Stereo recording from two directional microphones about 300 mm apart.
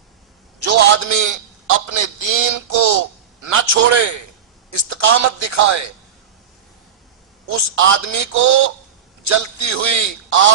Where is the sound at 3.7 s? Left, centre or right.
Right.